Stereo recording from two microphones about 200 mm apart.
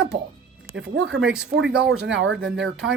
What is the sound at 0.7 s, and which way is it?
Speech, 65° right (ahead or behind).